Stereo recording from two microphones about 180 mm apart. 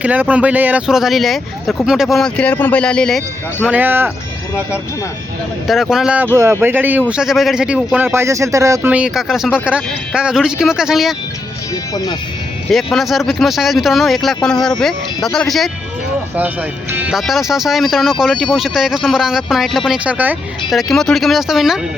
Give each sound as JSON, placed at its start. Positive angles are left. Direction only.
{"t": 0.0, "sound": "speech", "side_deg": -10}
{"t": 3.7, "sound": "speech", "side_deg": -10}
{"t": 5.6, "sound": "speech", "side_deg": 0}
{"t": 11.7, "sound": "speech", "side_deg": 20}
{"t": 12.7, "sound": "speech", "side_deg": 0}
{"t": 16.9, "sound": "speech", "side_deg": -5}